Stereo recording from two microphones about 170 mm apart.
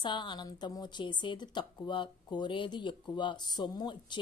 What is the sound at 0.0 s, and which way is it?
A woman's voice, 25° left (ahead or behind).